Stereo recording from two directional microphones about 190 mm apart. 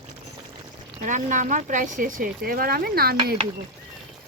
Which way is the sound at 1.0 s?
40° right (ahead or behind).